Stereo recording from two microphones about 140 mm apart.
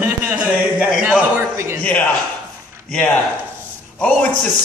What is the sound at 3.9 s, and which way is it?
Speech, 5° left (ahead or behind).